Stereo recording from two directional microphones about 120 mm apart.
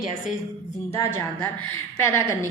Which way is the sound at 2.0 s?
20° left (ahead or behind).